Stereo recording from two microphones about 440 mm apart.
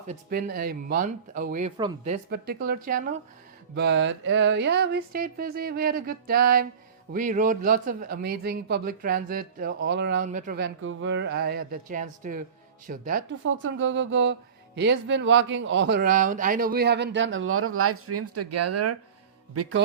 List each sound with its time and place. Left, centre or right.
0.1 s a man's voice: centre